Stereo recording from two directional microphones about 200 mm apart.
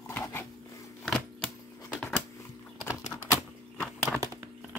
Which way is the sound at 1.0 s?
Centre (ahead or behind).